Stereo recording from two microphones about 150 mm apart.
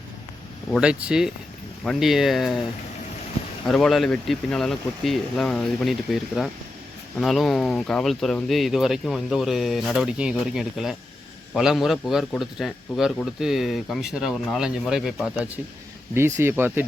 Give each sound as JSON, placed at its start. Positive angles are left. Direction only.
{"t": 0.8, "sound": "a man's voice", "side_deg": -5}
{"t": 3.7, "sound": "a man's voice", "side_deg": 0}
{"t": 16.1, "sound": "speech", "side_deg": -15}